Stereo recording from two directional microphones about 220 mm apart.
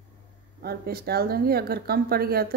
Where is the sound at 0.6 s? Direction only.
45° right (ahead or behind).